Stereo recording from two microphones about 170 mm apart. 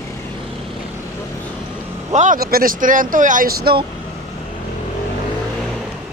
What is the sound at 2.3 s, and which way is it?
Speech, 60° right (ahead or behind).